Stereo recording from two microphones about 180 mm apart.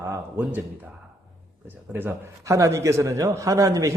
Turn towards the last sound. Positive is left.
turn(degrees=-20)  # may be behind; listen again after turning